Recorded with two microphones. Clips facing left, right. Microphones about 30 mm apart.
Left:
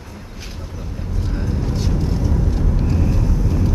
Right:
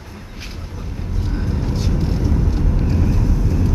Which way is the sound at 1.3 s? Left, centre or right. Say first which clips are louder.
Even; centre.